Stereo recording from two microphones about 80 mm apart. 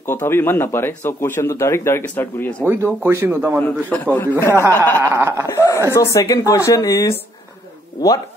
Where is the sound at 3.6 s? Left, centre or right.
Left.